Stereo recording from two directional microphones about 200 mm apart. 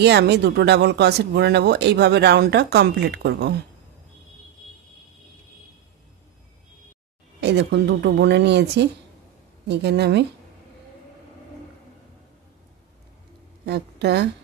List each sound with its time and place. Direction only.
0.0 s speech: 55° right (ahead or behind)
7.3 s speech: 55° right (ahead or behind)
13.7 s speech: 55° right (ahead or behind)